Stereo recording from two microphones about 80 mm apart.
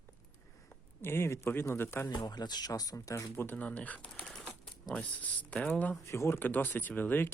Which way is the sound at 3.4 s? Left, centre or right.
Left.